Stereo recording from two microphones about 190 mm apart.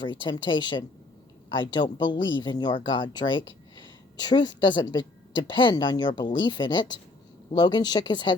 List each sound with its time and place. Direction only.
0.0 s speech: 25° left (ahead or behind)